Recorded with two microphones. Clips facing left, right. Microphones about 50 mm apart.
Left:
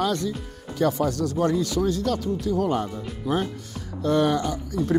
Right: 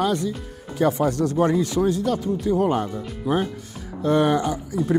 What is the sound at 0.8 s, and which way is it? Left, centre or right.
Speech, right.